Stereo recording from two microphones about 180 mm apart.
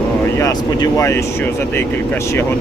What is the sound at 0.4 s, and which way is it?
Speech, 15° left (ahead or behind).